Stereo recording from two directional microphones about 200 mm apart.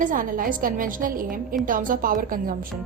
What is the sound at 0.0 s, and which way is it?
A woman's voice, 45° right (ahead or behind).